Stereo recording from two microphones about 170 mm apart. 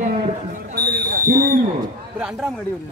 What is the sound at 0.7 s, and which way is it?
Speech, 65° right (ahead or behind).